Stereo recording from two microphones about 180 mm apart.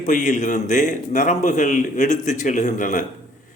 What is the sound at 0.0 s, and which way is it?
Speech, 45° left (ahead or behind).